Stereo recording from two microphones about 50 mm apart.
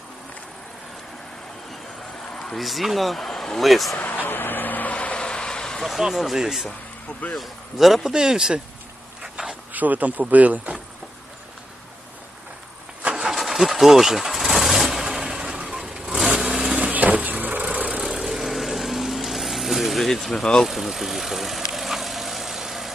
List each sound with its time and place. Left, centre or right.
2.3 s a sound: centre
2.6 s speech: centre
3.9 s vehicle: left; by 5.8 s centre
6.0 s speech: centre
9.2 s a sound: centre
9.7 s speech: right
13.1 s vehicle: centre
16.9 s vehicle: right
17.8 s vehicle: centre
20.7 s speech: centre
21.7 s vehicle: centre